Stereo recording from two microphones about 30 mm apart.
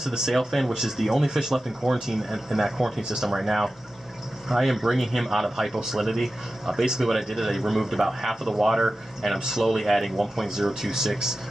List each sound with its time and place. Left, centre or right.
0.0 s speech: centre
0.4 s speech: centre
0.7 s speech: centre
3.3 s speech: centre
9.4 s speech: centre
9.7 s speech: centre
10.5 s speech: centre